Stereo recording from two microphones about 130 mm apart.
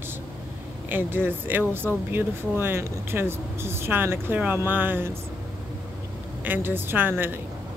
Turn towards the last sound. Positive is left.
turn(degrees=-15)  # may be behind; listen again after turning